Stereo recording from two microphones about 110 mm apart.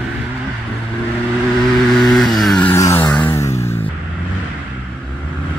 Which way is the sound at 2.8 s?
25° left (ahead or behind).